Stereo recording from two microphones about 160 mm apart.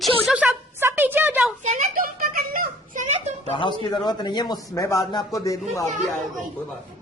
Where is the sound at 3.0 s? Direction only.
45° right (ahead or behind).